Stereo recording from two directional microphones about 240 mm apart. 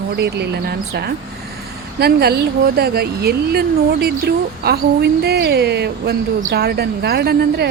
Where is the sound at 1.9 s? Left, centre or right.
Right.